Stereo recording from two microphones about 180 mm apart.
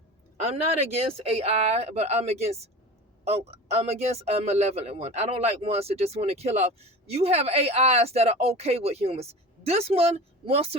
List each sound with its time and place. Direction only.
0.4 s speech: 35° right (ahead or behind)